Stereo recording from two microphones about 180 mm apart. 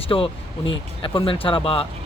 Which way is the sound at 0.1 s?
25° left (ahead or behind).